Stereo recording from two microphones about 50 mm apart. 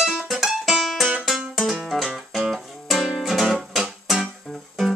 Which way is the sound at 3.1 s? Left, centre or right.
Centre.